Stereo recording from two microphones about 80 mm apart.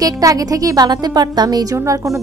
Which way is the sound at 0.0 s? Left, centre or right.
Right.